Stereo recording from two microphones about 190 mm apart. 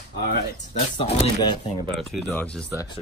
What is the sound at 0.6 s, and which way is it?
Speech, 35° left (ahead or behind).